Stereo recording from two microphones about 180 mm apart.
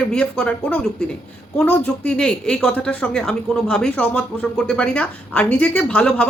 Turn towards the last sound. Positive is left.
turn(degrees=5)  # may be behind; listen again after turning